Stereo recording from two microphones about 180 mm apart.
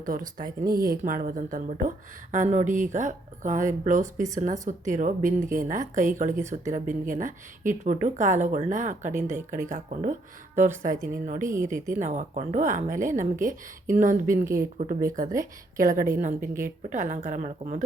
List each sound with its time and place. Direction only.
0.0 s a woman's voice: 50° right (ahead or behind)